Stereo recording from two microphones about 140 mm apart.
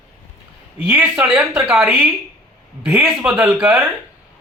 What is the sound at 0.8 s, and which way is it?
A man's voice, 10° right (ahead or behind).